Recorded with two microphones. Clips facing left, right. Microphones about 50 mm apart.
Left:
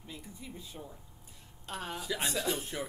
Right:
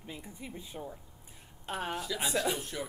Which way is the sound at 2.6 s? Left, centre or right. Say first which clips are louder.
Even; centre.